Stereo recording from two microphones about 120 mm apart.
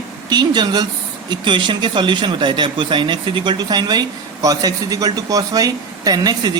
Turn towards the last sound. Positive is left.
turn(degrees=-35)  # may be behind; listen again after turning